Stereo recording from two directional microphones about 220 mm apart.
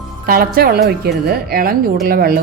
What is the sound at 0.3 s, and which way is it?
Speech, 40° right (ahead or behind).